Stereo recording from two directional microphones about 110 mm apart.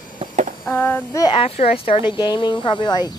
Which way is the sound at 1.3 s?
60° left (ahead or behind).